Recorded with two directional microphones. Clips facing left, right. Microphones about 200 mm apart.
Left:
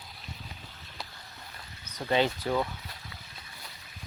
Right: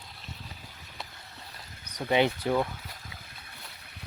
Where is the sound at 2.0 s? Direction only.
15° right (ahead or behind).